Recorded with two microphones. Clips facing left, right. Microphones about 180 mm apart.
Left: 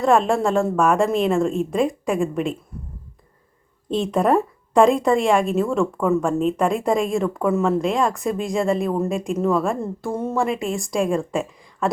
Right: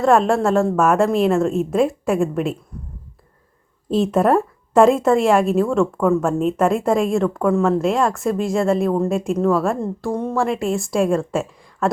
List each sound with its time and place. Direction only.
0.0 s speech: centre (ahead or behind)
3.8 s speech: 5° right (ahead or behind)